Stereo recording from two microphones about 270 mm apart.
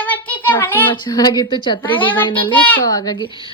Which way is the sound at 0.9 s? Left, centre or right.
Centre.